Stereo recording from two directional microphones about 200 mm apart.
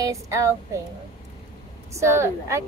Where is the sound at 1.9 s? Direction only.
15° right (ahead or behind).